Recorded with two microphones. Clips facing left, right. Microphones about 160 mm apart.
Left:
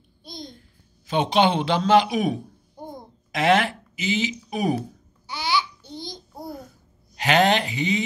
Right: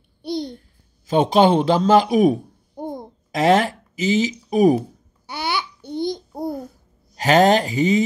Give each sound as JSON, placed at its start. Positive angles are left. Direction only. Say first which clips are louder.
{"t": 0.2, "sound": "babbling", "louder": "right 13 dB", "side_deg": -70}
{"t": 1.0, "sound": "a man's voice", "louder": "right 5 dB", "side_deg": -40}
{"t": 5.2, "sound": "babbling", "louder": "even", "side_deg": -55}
{"t": 7.2, "sound": "a man's voice", "louder": "right 5 dB", "side_deg": -40}